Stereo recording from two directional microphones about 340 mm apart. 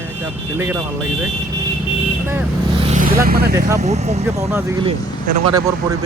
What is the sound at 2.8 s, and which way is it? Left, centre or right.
Vehicle, right.